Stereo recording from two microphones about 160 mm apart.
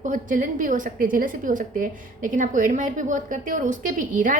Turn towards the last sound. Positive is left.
turn(degrees=-55)  # may be behind; listen again after turning